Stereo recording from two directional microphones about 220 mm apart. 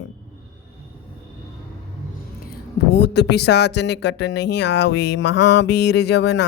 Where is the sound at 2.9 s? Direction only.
50° left (ahead or behind).